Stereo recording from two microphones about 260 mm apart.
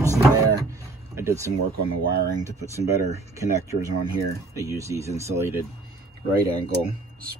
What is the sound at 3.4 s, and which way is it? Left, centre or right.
Speech, centre.